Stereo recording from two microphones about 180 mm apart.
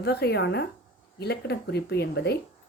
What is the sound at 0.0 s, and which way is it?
Speech, 65° left (ahead or behind).